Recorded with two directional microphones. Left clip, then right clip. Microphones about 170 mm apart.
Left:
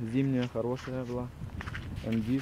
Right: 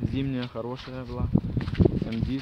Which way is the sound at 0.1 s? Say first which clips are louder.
Left 1 dB; centre (ahead or behind).